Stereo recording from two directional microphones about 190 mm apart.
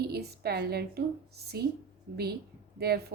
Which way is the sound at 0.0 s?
55° right (ahead or behind).